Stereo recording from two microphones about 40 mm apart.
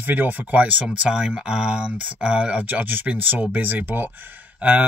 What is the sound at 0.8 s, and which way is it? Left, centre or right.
Speech, right.